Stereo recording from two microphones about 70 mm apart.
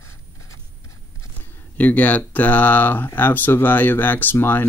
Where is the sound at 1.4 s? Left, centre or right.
Left.